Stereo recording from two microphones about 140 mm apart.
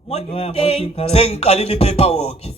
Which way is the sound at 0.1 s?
50° left (ahead or behind).